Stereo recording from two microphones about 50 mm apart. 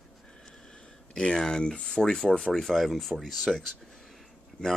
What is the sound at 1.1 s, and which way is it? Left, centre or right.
Speech, centre.